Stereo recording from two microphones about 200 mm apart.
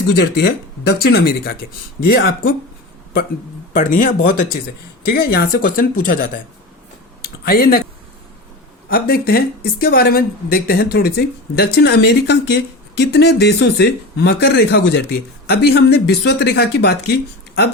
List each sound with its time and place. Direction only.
0.1 s speech: 50° left (ahead or behind)
3.7 s speech: 40° left (ahead or behind)
7.2 s a sound: 50° left (ahead or behind)
8.9 s speech: 50° left (ahead or behind)